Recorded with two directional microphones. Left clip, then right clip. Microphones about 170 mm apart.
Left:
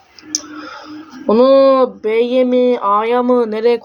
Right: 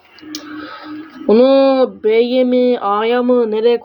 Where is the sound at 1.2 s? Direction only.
Centre (ahead or behind).